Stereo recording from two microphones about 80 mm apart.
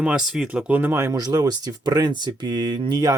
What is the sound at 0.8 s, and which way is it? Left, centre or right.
Speech, right.